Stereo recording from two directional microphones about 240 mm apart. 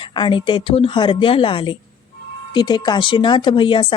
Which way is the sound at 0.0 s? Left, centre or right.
Centre.